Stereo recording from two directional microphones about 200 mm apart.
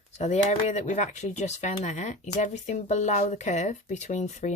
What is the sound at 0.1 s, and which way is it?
Speech, 35° left (ahead or behind).